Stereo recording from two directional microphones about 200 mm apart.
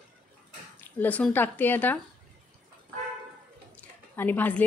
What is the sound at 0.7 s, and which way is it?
A woman's voice, 10° left (ahead or behind).